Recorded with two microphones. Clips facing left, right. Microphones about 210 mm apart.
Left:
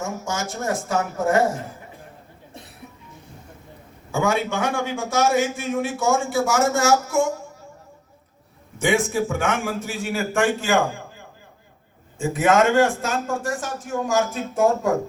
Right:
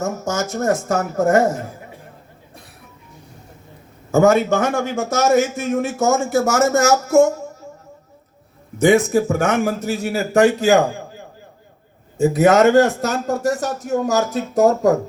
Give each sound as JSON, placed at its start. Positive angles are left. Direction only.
{"t": 0.0, "sound": "a man's voice", "side_deg": -40}
{"t": 4.1, "sound": "a man's voice", "side_deg": -45}
{"t": 8.8, "sound": "a man's voice", "side_deg": -40}
{"t": 12.1, "sound": "a man's voice", "side_deg": -40}